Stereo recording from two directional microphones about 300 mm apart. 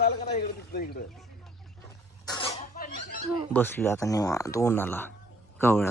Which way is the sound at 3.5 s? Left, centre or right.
Centre.